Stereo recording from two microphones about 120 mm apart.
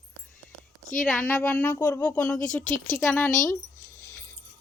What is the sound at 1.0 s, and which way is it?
A woman's voice, 10° left (ahead or behind).